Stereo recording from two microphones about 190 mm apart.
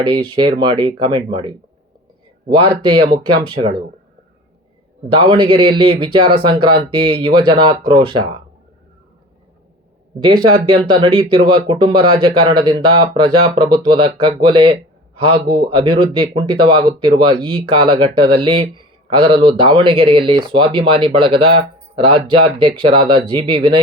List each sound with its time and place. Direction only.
0.1 s speech: 25° right (ahead or behind)
5.0 s speech: 25° right (ahead or behind)
10.8 s speech: 25° right (ahead or behind)